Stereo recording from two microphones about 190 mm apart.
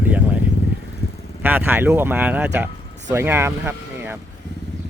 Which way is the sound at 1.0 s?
60° left (ahead or behind).